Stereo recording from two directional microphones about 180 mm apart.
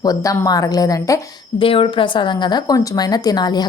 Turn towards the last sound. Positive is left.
turn(degrees=25)  # may be behind; listen again after turning